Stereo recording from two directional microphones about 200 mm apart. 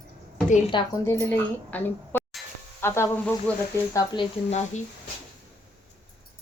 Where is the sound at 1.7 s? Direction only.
10° left (ahead or behind).